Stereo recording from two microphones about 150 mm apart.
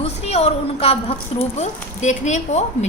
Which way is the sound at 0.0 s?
45° left (ahead or behind).